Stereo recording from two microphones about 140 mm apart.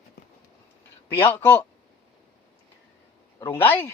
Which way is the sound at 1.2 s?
15° left (ahead or behind).